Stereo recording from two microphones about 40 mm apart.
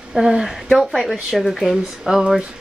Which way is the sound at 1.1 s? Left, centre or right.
Centre.